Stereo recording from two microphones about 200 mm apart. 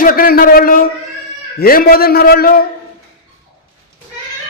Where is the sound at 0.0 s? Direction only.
45° left (ahead or behind).